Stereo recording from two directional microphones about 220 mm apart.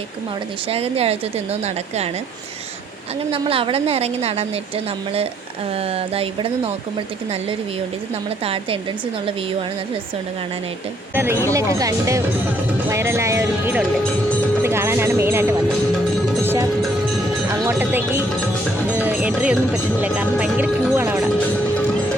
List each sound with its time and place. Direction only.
0.7 s a woman's voice: 25° right (ahead or behind)
3.3 s a woman's voice: 25° right (ahead or behind)
5.7 s a woman's voice: 25° right (ahead or behind)
11.1 s speech: 10° right (ahead or behind)
16.4 s music: 10° right (ahead or behind)
17.7 s speech: 10° right (ahead or behind)